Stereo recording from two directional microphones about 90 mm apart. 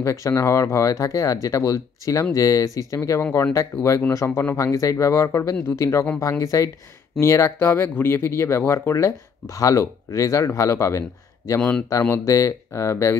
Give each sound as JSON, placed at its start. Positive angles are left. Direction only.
{"t": 0.0, "sound": "speech", "side_deg": 35}